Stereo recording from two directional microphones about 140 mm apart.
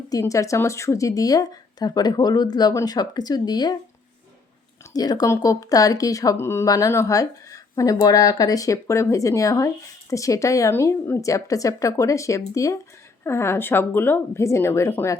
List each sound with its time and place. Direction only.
0.1 s speech: 25° left (ahead or behind)
4.9 s speech: 30° left (ahead or behind)